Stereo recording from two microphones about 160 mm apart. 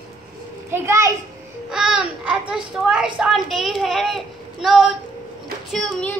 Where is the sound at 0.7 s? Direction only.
15° right (ahead or behind).